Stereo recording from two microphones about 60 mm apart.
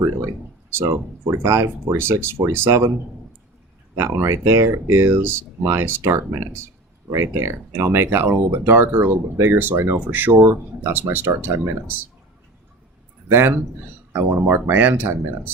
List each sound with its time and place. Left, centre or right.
0.9 s speech: right
3.9 s speech: right
13.3 s speech: right